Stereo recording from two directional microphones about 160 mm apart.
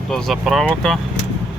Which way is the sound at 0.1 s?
Centre (ahead or behind).